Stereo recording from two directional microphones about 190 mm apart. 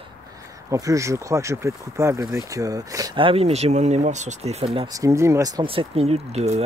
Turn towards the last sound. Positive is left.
turn(degrees=-35)  # may be behind; listen again after turning